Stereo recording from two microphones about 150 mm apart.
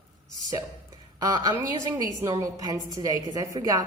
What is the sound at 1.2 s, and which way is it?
A woman's voice, 20° right (ahead or behind).